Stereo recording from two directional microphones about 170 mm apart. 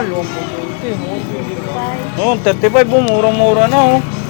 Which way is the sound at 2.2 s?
45° right (ahead or behind).